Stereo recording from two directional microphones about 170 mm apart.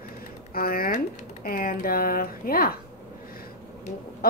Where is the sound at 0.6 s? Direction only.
60° left (ahead or behind).